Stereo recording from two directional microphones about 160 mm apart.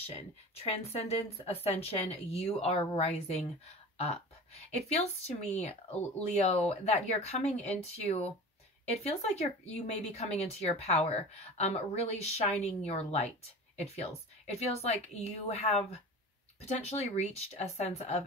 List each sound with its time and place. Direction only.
0.0 s speech: 40° left (ahead or behind)